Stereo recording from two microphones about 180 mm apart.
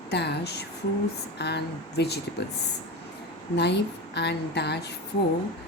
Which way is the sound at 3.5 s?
70° left (ahead or behind).